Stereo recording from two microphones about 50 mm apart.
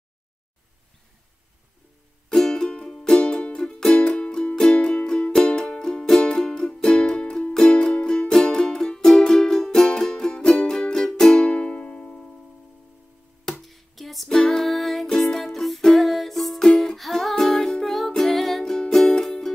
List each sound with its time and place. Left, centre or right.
2.2 s music: centre
11.5 s music: left
13.5 s music: centre